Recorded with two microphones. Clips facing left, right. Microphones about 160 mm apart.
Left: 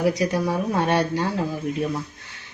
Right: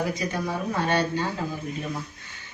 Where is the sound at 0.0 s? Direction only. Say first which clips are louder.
Left 6 dB; 75° left (ahead or behind).